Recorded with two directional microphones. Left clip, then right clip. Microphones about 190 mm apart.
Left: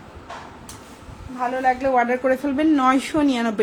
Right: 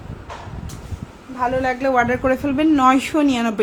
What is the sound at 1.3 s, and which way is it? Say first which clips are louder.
A woman's voice: right 1 dB; 40° right (ahead or behind).